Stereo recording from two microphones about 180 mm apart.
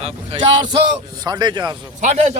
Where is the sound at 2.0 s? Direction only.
40° right (ahead or behind).